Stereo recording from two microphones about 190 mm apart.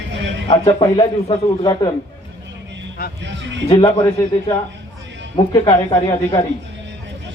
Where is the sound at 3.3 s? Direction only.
70° right (ahead or behind).